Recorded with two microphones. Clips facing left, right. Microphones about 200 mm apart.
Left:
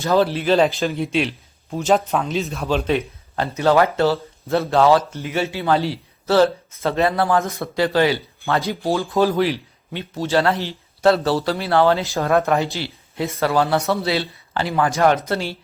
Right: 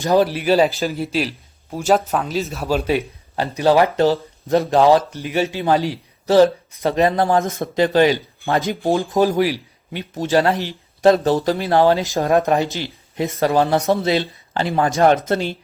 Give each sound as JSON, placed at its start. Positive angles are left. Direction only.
{"t": 0.0, "sound": "a man's voice", "side_deg": -15}